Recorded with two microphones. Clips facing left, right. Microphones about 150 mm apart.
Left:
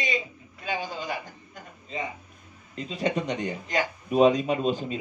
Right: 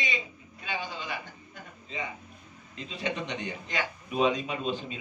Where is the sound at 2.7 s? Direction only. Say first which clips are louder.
Left 6 dB; 40° left (ahead or behind).